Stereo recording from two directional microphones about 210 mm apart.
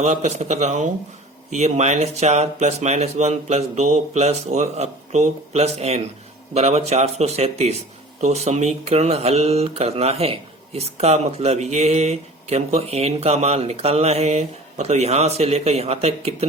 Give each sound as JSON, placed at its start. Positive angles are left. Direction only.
{"t": 0.0, "sound": "speech", "side_deg": -30}